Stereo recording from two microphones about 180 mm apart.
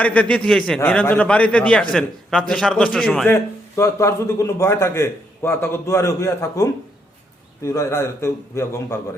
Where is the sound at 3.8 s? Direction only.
15° left (ahead or behind).